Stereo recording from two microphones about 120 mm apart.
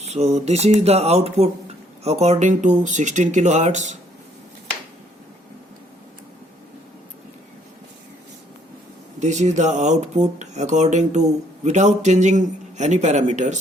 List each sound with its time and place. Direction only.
0.0 s mantra: 65° right (ahead or behind)
2.0 s speech: 65° right (ahead or behind)
9.2 s speech: 75° right (ahead or behind)